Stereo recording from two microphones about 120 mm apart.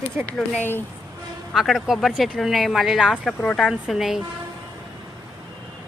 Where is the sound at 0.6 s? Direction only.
15° left (ahead or behind).